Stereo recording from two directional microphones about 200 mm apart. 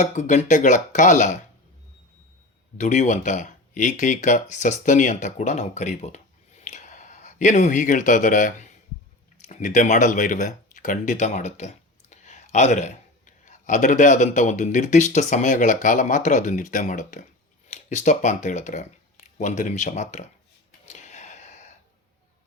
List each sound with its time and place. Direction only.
0.0 s speech: 35° left (ahead or behind)
2.7 s speech: 35° left (ahead or behind)
6.6 s a sound: 35° left (ahead or behind)
9.4 s speech: 40° left (ahead or behind)
20.8 s gasp: 35° left (ahead or behind)